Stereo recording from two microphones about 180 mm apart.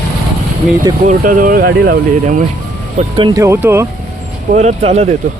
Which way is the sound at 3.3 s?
15° right (ahead or behind).